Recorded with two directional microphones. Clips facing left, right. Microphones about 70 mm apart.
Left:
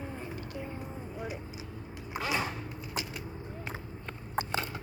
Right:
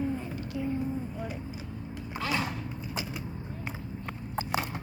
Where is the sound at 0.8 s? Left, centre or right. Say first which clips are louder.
Right 6 dB; centre.